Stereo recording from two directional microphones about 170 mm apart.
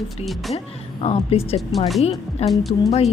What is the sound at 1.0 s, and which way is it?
Speech, 35° left (ahead or behind).